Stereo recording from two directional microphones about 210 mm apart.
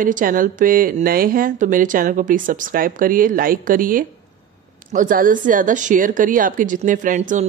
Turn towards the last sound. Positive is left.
turn(degrees=-35)  # may be behind; listen again after turning